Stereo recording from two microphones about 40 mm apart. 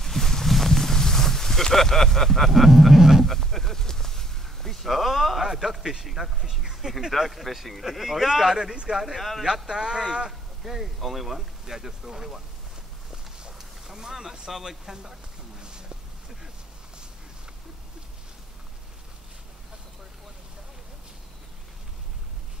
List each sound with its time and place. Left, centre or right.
0.0 s a sound: centre
3.3 s a sound: centre
6.0 s speech: centre
8.5 s speech: centre
9.0 s speech: centre
9.4 s speech: centre
10.6 s speech: centre
13.5 s speech: centre
15.6 s a sound: right